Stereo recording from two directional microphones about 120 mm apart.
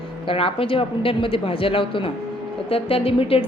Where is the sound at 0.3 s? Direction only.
50° left (ahead or behind).